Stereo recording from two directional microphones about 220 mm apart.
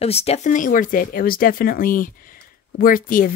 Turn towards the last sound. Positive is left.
turn(degrees=40)  # may be behind; listen again after turning